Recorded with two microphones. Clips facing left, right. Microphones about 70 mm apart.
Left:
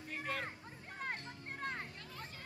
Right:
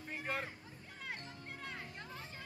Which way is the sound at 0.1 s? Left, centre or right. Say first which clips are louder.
Even; left.